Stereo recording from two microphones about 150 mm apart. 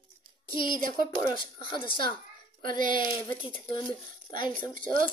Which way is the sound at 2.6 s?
65° right (ahead or behind).